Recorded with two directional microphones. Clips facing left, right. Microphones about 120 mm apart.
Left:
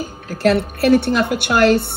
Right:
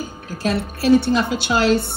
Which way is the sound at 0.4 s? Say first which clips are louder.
Left 6 dB; 60° left (ahead or behind).